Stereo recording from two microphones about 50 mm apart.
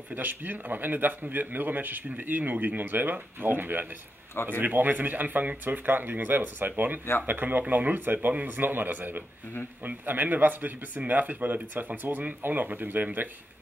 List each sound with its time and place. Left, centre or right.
0.1 s speech: right